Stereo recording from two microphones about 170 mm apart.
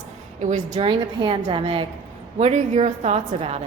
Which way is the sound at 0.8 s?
30° right (ahead or behind).